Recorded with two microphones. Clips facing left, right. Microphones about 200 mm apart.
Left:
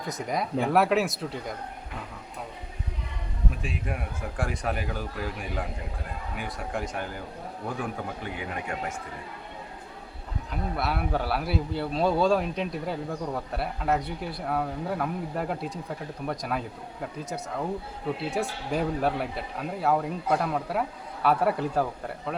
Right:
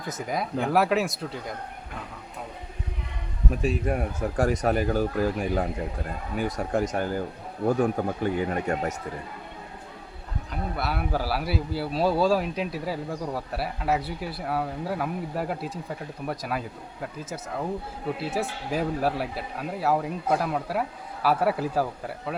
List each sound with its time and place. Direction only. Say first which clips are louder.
0.1 s a man's voice: even; centre (ahead or behind)
3.5 s speech: right 11 dB; 40° right (ahead or behind)
10.5 s a man's voice: even; centre (ahead or behind)